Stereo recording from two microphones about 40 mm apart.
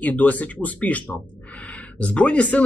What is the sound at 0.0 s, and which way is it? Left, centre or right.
Speech, left.